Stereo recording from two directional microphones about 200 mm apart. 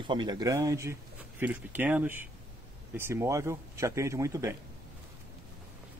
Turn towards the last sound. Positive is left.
turn(degrees=-15)  # may be behind; listen again after turning